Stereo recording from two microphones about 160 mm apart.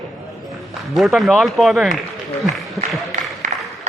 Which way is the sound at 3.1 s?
50° right (ahead or behind).